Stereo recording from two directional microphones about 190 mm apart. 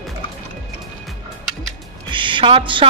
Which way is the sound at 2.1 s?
25° right (ahead or behind).